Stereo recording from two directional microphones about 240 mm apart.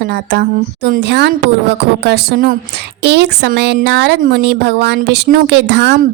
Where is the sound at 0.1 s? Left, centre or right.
Right.